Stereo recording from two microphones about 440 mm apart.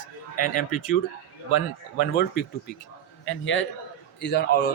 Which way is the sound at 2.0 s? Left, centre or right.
Left.